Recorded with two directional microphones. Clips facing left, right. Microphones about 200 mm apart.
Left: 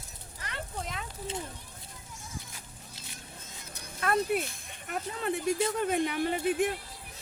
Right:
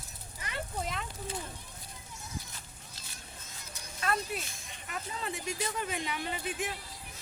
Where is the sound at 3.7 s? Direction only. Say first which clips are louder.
Left 4 dB; 55° left (ahead or behind).